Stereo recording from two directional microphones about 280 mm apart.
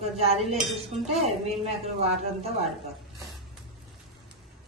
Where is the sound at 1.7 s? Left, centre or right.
Right.